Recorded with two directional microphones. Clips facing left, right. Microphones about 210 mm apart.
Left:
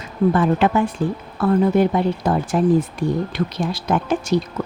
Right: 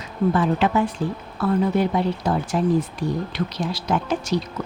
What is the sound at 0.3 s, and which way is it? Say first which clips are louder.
Speech: left 2 dB; 55° left (ahead or behind).